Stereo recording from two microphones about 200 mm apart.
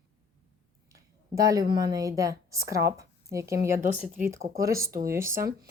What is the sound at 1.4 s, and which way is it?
Speech, 15° right (ahead or behind).